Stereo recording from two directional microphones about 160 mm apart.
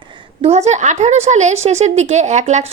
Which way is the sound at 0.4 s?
45° right (ahead or behind).